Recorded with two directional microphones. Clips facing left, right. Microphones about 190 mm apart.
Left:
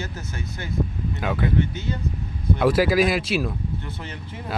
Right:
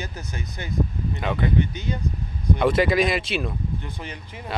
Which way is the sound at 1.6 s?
15° right (ahead or behind).